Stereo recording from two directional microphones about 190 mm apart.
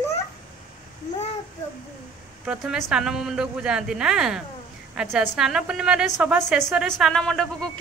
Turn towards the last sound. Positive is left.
turn(degrees=5)  # may be behind; listen again after turning